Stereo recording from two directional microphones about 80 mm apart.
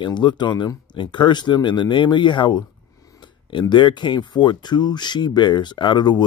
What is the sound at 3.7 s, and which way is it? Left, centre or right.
Speech, left.